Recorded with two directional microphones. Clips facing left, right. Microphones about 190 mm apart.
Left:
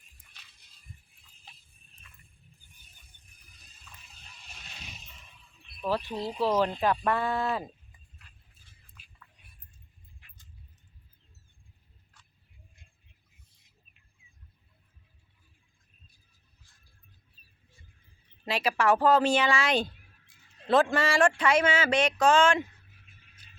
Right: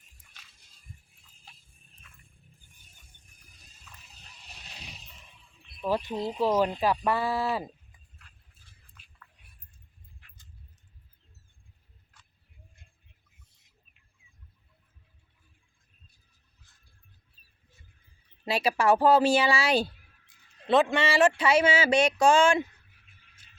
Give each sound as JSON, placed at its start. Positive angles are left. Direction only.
{"t": 4.4, "sound": "a sound", "side_deg": -35}
{"t": 5.6, "sound": "speech", "side_deg": -15}
{"t": 18.4, "sound": "speech", "side_deg": -10}